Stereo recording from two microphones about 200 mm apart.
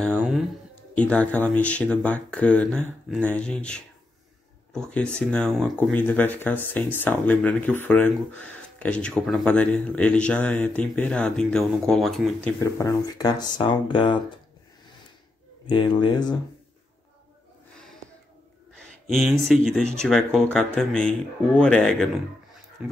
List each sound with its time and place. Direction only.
0.1 s a sound: 10° right (ahead or behind)
0.9 s speech: 5° left (ahead or behind)
12.5 s speech: 15° left (ahead or behind)
15.6 s speech: 25° left (ahead or behind)
18.8 s speech: centre (ahead or behind)